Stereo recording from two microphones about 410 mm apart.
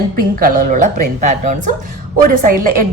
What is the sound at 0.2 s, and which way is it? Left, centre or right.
A woman's voice, right.